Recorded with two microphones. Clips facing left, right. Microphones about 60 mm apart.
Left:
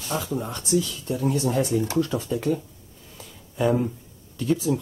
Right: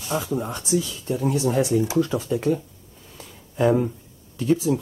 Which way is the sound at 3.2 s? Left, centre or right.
Centre.